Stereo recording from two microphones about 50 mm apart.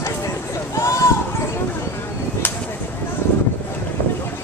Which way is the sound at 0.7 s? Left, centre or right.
Left.